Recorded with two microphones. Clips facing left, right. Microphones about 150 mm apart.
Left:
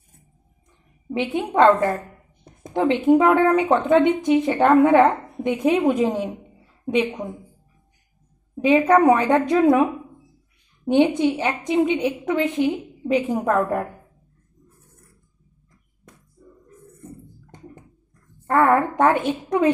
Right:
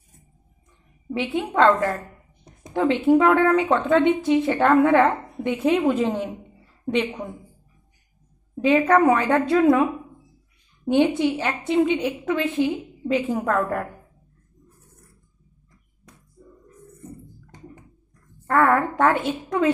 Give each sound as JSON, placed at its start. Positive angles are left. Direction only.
{"t": 1.1, "sound": "speech", "side_deg": 15}
{"t": 8.5, "sound": "speech", "side_deg": 15}
{"t": 10.8, "sound": "speech", "side_deg": 20}
{"t": 18.4, "sound": "speech", "side_deg": 15}